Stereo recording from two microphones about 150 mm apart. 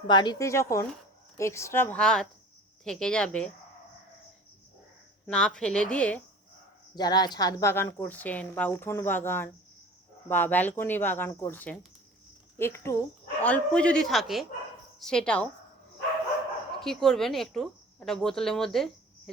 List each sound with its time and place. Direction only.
0.1 s speech: 30° left (ahead or behind)
0.4 s speech: 20° left (ahead or behind)
5.2 s speech: 5° left (ahead or behind)
6.9 s speech: 25° left (ahead or behind); by 15.4 s 5° left (ahead or behind)
16.8 s speech: 5° left (ahead or behind)